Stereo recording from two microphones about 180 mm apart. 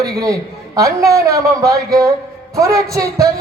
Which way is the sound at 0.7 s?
15° right (ahead or behind).